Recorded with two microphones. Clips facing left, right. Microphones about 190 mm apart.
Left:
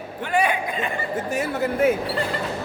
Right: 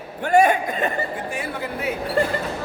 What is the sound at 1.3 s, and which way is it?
Speech, 45° left (ahead or behind).